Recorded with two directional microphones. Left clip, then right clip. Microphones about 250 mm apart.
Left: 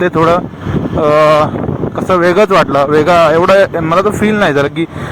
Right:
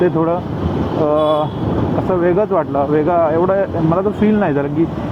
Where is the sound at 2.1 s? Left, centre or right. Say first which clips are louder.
Left 8 dB; left.